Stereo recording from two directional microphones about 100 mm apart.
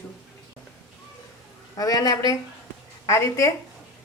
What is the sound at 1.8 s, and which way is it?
A woman's voice, 40° left (ahead or behind).